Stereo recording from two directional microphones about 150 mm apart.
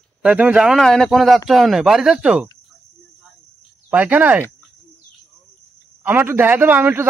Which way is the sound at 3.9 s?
10° right (ahead or behind).